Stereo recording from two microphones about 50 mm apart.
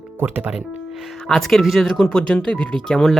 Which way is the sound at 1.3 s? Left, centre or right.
Centre.